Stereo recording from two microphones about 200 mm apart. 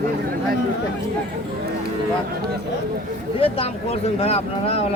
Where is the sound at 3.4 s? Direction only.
30° left (ahead or behind).